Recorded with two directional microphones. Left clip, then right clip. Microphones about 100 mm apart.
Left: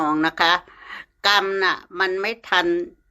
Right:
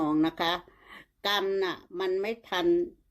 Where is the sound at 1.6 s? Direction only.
25° right (ahead or behind).